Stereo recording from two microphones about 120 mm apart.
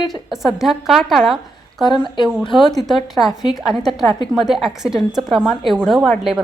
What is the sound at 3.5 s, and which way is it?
A woman's voice, centre (ahead or behind).